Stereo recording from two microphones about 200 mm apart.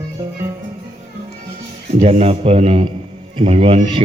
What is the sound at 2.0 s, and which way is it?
A man's voice, 35° right (ahead or behind).